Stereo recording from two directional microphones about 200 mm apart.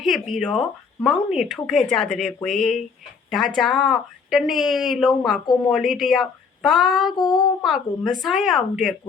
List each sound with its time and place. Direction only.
0.0 s speech: centre (ahead or behind)
7.2 s child singing: 20° left (ahead or behind)
7.6 s speech: centre (ahead or behind)